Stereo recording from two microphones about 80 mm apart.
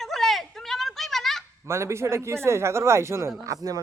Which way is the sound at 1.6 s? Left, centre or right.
Right.